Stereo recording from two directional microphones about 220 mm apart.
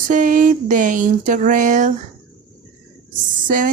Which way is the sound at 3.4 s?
40° right (ahead or behind).